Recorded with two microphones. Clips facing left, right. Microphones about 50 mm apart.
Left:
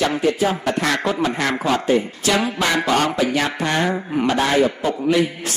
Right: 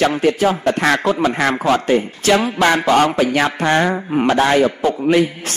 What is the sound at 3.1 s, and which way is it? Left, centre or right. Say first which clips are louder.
Speech: right 4 dB; right.